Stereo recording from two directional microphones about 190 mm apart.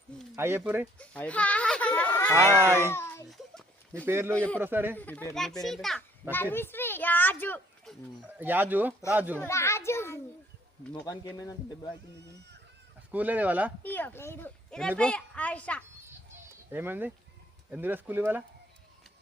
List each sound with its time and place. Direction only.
0.3 s speech: 10° right (ahead or behind)
0.9 s a sound: 5° left (ahead or behind)
3.2 s a sound: centre (ahead or behind)
4.0 s speech: 10° right (ahead or behind)
4.4 s a woman's voice: 5° left (ahead or behind)
4.6 s speech: 10° right (ahead or behind)
4.9 s a child's voice: 10° left (ahead or behind)
8.4 s speech: 10° right (ahead or behind)
9.4 s a sound: 15° left (ahead or behind)
11.0 s a man's voice: 20° left (ahead or behind)
13.1 s speech: 10° right (ahead or behind)
13.8 s a woman's voice: 10° left (ahead or behind)
16.7 s speech: 10° right (ahead or behind)